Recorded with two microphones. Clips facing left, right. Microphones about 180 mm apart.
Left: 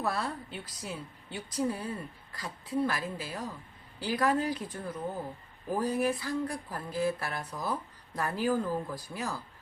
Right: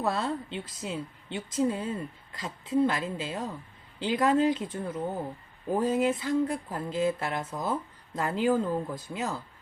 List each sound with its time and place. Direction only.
0.0 s speech: 25° right (ahead or behind)